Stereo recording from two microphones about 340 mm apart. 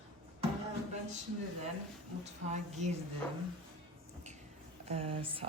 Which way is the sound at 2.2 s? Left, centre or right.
Centre.